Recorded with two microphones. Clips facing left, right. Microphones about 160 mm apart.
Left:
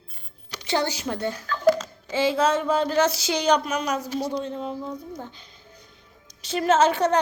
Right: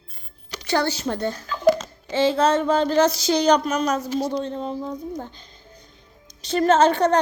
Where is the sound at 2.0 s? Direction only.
5° left (ahead or behind).